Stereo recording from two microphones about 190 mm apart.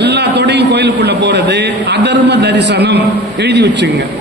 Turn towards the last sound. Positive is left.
turn(degrees=-65)  # may be behind; listen again after turning